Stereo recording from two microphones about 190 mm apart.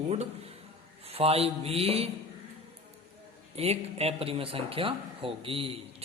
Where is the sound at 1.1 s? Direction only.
30° right (ahead or behind).